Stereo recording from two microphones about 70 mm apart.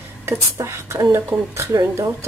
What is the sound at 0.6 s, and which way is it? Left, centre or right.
Speech, right.